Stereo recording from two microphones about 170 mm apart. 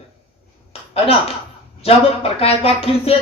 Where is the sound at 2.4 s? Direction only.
35° left (ahead or behind).